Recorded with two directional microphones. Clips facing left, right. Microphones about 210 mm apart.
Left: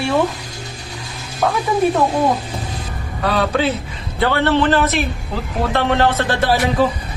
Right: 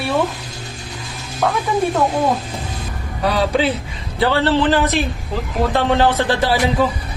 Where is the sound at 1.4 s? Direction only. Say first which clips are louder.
Even; 5° left (ahead or behind).